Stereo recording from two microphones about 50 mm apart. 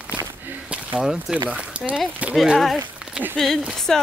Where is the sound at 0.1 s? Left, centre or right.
Right.